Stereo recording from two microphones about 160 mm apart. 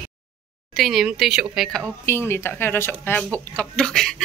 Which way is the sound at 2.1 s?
15° left (ahead or behind).